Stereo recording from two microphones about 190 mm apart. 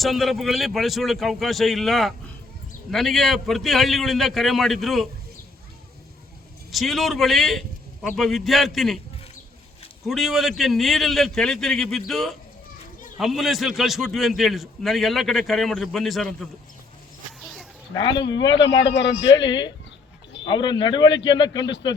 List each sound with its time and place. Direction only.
0.0 s a man's voice: centre (ahead or behind)
6.7 s a man's voice: centre (ahead or behind)
10.1 s a man's voice: centre (ahead or behind)
17.4 s a sound: centre (ahead or behind)
17.9 s a man's voice: 25° left (ahead or behind)
18.9 s a man's voice: 70° left (ahead or behind)
19.5 s a man's voice: 25° left (ahead or behind)